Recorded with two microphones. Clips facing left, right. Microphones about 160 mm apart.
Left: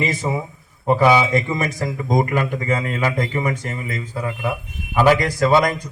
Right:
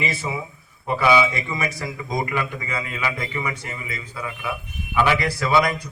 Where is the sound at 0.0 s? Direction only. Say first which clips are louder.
Left 5 dB; 45° left (ahead or behind).